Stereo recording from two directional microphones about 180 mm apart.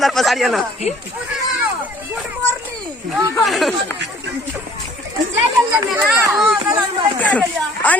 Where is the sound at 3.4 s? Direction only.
Centre (ahead or behind).